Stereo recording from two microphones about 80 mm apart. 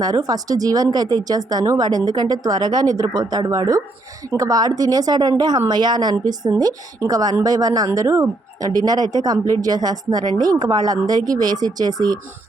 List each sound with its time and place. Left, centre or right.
0.0 s a woman's voice: right
7.9 s speech: right